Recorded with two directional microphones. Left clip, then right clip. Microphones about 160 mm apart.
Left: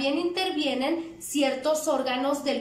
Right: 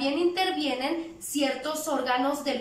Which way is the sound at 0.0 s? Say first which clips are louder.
Right 1 dB; 20° left (ahead or behind).